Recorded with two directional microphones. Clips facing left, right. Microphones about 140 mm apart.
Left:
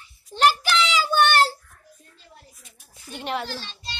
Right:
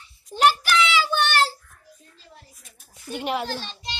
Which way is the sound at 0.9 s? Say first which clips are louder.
Left 2 dB; 45° left (ahead or behind).